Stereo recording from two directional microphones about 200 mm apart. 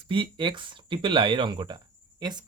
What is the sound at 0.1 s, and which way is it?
Speech, 25° right (ahead or behind).